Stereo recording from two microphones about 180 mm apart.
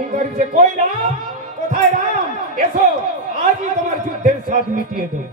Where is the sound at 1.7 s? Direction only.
45° right (ahead or behind).